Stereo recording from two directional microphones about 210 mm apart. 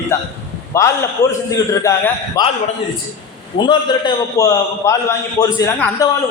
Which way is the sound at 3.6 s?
20° left (ahead or behind).